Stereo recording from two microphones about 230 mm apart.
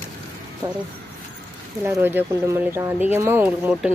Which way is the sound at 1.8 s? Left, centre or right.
Centre.